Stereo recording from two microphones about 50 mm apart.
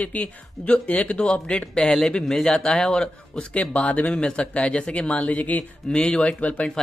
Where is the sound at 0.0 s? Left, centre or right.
Left.